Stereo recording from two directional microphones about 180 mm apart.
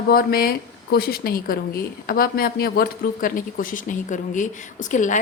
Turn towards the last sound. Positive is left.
turn(degrees=45)  # may be behind; listen again after turning